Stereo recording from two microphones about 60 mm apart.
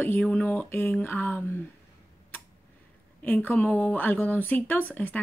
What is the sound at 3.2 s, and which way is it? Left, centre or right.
Speech, left.